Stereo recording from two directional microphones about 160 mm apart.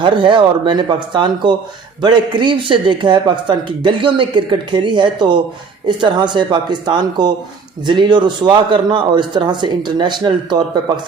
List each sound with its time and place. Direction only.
0.0 s a man's voice: 30° right (ahead or behind)